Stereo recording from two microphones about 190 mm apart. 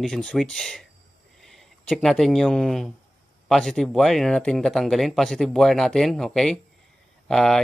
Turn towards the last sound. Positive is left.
turn(degrees=0)  # may be behind; listen again after turning